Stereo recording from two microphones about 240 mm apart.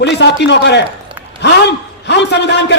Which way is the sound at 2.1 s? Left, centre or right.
Left.